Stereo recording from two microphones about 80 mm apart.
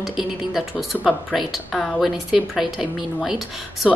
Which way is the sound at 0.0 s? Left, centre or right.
Centre.